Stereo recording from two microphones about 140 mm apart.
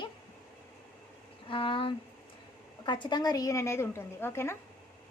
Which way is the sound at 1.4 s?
40° left (ahead or behind).